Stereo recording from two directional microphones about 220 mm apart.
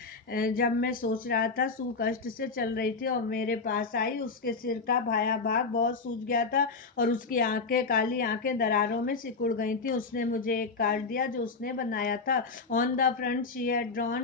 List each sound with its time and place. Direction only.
0.3 s speech: 40° left (ahead or behind)